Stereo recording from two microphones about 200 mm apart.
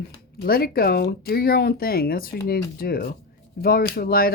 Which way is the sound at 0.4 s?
50° left (ahead or behind).